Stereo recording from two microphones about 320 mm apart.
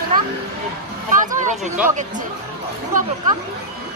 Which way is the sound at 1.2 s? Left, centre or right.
Right.